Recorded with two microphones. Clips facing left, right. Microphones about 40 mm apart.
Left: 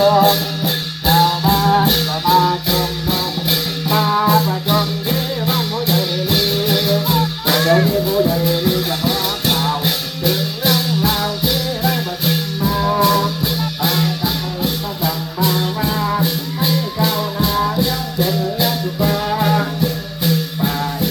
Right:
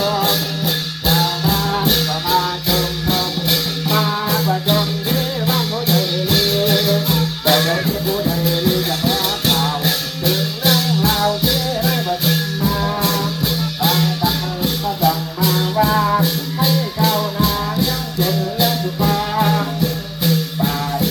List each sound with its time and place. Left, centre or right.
0.3 s music: left
1.5 s music: left
1.9 s music: centre
5.5 s music: left
6.3 s music: centre
15.4 s music: centre
15.8 s music: centre